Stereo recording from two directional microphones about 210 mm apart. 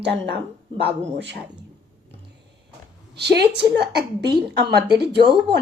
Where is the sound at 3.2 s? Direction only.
50° right (ahead or behind).